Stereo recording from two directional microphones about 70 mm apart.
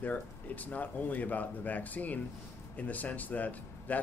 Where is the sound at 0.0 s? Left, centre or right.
Left.